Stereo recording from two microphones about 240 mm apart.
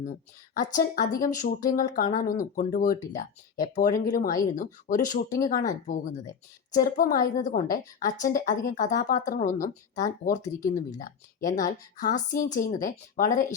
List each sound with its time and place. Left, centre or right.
0.5 s a woman's voice: left
10.4 s speech: centre
11.4 s a woman's voice: left